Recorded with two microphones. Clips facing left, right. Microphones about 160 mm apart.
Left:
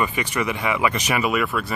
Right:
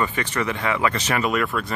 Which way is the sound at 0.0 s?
10° left (ahead or behind).